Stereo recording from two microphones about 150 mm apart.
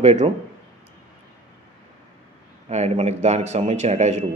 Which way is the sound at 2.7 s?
45° right (ahead or behind).